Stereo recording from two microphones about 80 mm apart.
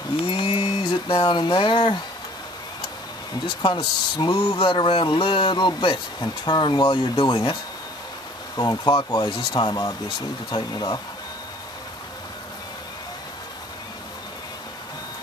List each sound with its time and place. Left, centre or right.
0.4 s a sound: left
3.4 s speech: left
6.2 s speech: left
8.5 s speech: left